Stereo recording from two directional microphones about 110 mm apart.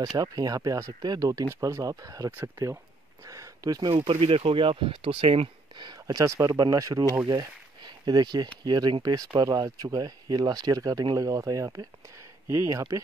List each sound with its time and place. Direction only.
0.0 s speech: 35° right (ahead or behind)
4.1 s speech: 65° right (ahead or behind)
5.8 s speech: 40° right (ahead or behind)